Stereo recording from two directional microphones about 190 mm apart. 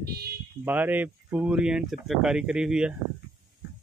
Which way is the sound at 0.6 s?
10° right (ahead or behind).